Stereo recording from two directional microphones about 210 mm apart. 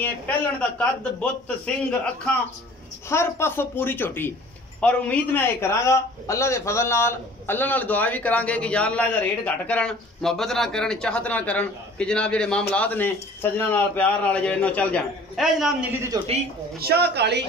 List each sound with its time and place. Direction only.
0.0 s a man's voice: 5° left (ahead or behind)
3.1 s a man's voice: 10° left (ahead or behind)
16.1 s speech: 20° right (ahead or behind)
16.8 s speech: 50° right (ahead or behind)